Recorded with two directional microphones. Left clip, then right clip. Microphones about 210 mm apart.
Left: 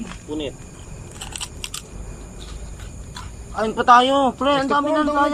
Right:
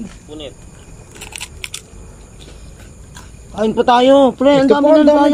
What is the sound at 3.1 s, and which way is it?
A man's voice, 20° right (ahead or behind).